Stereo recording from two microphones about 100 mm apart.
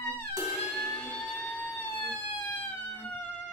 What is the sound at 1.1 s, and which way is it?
Fire engine, centre (ahead or behind).